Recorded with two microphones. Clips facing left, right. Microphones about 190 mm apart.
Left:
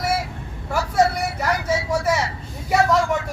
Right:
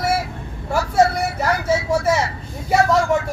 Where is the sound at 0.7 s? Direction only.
25° right (ahead or behind).